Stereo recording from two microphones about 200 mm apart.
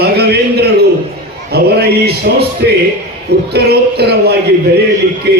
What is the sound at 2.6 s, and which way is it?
A man's voice, 60° right (ahead or behind).